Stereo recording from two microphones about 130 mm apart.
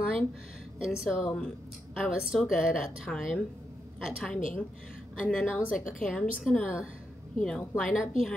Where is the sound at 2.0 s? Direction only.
5° right (ahead or behind).